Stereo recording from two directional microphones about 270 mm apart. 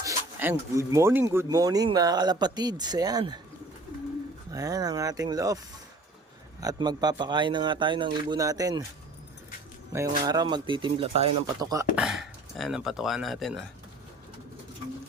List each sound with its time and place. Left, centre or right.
0.0 s speech: centre
4.5 s speech: centre
6.6 s speech: centre
9.9 s speech: centre
11.9 s speech: centre